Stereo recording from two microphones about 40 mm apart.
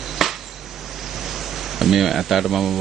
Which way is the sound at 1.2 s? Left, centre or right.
Centre.